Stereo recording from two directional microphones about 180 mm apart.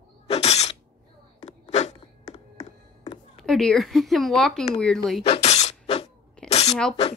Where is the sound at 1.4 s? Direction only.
40° left (ahead or behind).